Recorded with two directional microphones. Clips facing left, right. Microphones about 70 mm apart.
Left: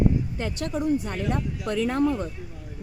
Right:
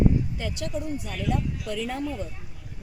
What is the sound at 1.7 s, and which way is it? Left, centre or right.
Speech, left.